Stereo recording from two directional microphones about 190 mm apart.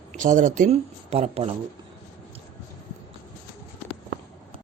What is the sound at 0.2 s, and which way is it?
Speech, 45° right (ahead or behind).